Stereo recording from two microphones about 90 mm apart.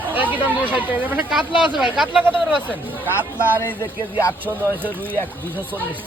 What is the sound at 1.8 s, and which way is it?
Speech, 5° right (ahead or behind).